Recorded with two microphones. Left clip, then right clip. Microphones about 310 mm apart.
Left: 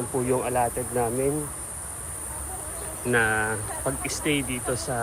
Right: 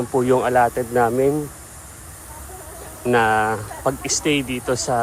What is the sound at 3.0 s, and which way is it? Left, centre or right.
Speech, centre.